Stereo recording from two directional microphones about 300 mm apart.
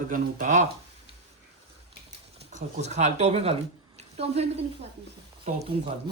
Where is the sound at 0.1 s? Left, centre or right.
Right.